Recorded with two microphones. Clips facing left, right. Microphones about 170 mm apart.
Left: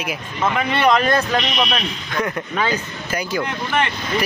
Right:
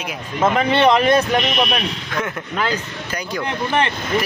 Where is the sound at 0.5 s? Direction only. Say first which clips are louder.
Right 2 dB; 25° right (ahead or behind).